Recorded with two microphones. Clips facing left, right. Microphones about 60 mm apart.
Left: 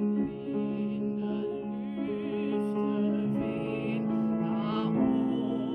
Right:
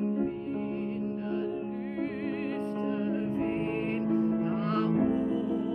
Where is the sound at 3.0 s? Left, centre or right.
Right.